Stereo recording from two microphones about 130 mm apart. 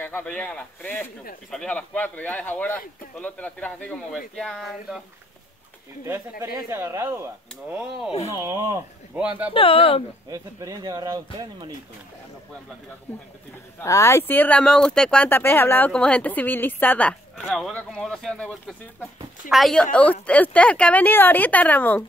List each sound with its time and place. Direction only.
0.0 s speech: 10° left (ahead or behind)
6.0 s speech: 20° right (ahead or behind)
9.5 s speech: 45° left (ahead or behind)
10.3 s speech: 25° right (ahead or behind)
13.7 s speech: 25° left (ahead or behind)
17.5 s speech: centre (ahead or behind)